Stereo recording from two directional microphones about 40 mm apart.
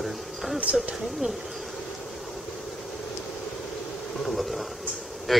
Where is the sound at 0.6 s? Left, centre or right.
Right.